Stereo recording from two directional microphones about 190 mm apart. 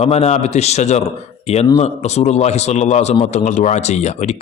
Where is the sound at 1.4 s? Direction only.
35° left (ahead or behind).